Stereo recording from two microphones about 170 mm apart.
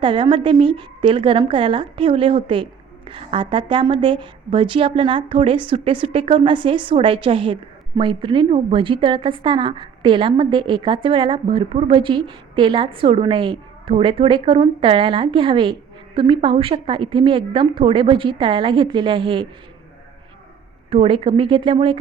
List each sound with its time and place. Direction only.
0.0 s a woman's voice: 30° right (ahead or behind)
20.9 s a woman's voice: 35° right (ahead or behind)